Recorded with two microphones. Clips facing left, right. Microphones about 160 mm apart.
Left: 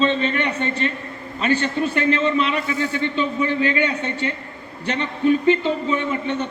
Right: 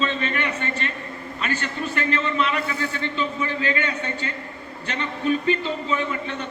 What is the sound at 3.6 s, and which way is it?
A man's voice, 20° left (ahead or behind).